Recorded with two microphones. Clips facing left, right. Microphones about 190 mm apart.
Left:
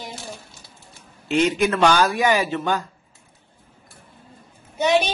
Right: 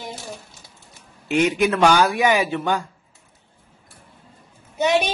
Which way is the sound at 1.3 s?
15° right (ahead or behind).